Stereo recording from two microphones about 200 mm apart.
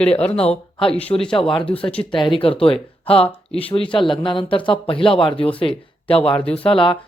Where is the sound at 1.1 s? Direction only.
20° left (ahead or behind).